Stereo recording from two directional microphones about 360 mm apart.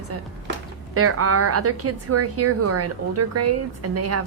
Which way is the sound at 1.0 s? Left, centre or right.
Right.